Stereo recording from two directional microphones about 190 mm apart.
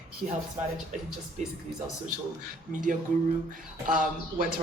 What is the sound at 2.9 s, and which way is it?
Speech, 45° right (ahead or behind).